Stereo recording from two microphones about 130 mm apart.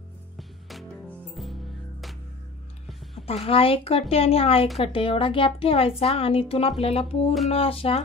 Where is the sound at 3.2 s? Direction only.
50° left (ahead or behind).